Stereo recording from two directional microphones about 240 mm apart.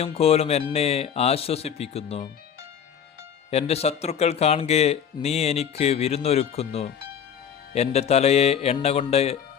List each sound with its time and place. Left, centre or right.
0.0 s speech: left
3.5 s speech: left